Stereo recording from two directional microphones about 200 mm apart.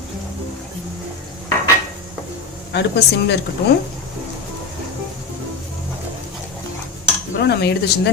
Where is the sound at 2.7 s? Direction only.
55° left (ahead or behind).